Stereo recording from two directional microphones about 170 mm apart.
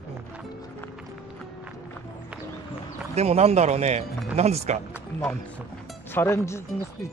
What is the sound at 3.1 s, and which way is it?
Speech, 40° right (ahead or behind).